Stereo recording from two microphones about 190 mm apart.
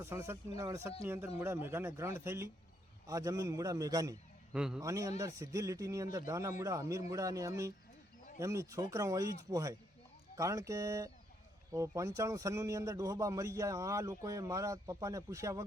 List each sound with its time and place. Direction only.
0.0 s speech: 15° right (ahead or behind)
4.5 s a man's voice: 5° right (ahead or behind)
4.8 s speech: 15° right (ahead or behind)